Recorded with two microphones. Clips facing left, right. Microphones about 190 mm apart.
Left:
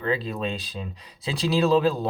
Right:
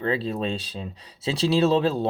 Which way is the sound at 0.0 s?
30° right (ahead or behind).